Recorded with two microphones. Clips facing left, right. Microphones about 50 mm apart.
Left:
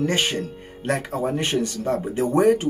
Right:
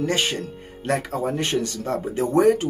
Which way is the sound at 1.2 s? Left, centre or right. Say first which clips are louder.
Left 1 dB; centre.